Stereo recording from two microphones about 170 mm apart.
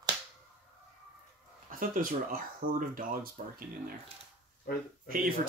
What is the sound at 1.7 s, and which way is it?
Speech, 55° right (ahead or behind).